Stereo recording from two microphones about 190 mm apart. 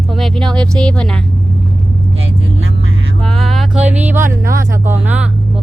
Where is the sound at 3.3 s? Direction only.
Centre (ahead or behind).